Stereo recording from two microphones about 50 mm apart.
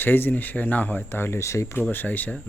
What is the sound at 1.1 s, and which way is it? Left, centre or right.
Speech, left.